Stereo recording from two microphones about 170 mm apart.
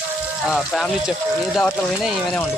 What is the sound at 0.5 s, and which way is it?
Speech, centre (ahead or behind).